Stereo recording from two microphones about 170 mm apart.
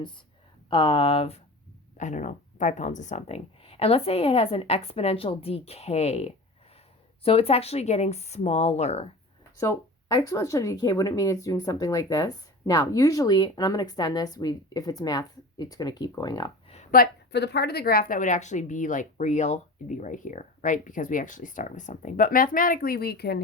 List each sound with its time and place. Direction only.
0.7 s speech: 30° left (ahead or behind)
2.0 s speech: 45° left (ahead or behind)
10.2 s speech: 20° left (ahead or behind)
16.9 s a woman's voice: 70° left (ahead or behind)